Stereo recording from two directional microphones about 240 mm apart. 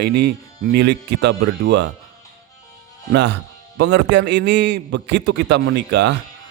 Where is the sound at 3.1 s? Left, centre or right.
Right.